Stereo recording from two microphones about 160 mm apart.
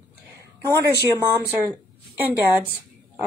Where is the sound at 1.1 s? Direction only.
15° right (ahead or behind).